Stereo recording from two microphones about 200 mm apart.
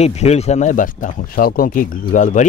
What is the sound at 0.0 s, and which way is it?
Speech, 30° left (ahead or behind).